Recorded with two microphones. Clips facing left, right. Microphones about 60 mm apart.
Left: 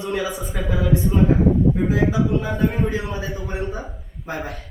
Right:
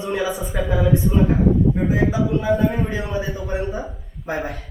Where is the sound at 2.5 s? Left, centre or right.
Centre.